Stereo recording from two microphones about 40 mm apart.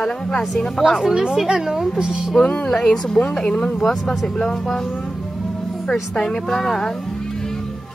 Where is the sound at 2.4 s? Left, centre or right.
Left.